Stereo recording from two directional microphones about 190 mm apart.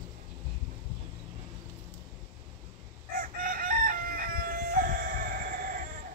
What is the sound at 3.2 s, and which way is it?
Chicken, 45° right (ahead or behind).